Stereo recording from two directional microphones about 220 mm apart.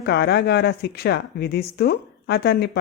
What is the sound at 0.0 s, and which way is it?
Speech, 50° left (ahead or behind).